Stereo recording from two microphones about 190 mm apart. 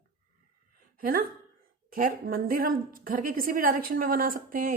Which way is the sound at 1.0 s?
50° right (ahead or behind).